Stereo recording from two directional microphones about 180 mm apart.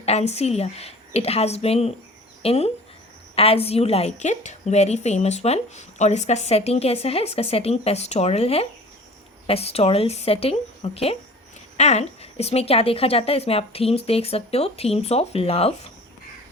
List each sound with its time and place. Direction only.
0.0 s a woman's voice: 35° left (ahead or behind)